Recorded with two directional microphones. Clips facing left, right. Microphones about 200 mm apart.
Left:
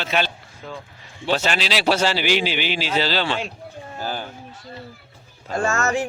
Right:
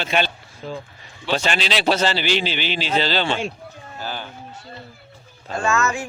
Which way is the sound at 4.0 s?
45° left (ahead or behind).